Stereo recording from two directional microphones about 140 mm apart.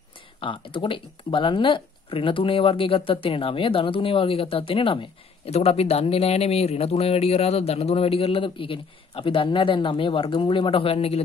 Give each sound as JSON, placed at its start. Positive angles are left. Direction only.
{"t": 0.4, "sound": "speech", "side_deg": 35}